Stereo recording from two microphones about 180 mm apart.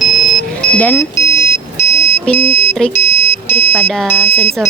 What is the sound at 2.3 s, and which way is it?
Music, 10° left (ahead or behind).